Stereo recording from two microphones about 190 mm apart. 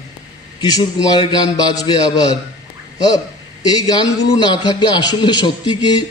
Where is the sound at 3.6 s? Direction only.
25° left (ahead or behind).